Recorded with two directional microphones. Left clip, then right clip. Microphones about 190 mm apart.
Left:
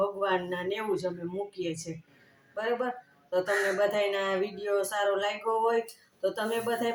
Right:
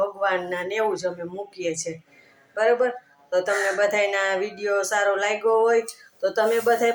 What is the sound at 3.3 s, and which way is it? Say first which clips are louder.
Speech: right 5 dB; 20° left (ahead or behind).